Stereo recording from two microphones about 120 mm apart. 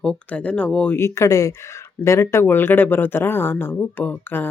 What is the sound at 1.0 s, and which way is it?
Speech, 25° left (ahead or behind).